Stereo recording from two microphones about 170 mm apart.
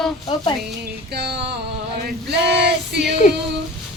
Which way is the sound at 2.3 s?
80° right.